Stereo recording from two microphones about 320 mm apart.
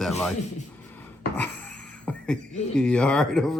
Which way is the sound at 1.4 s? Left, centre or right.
Centre.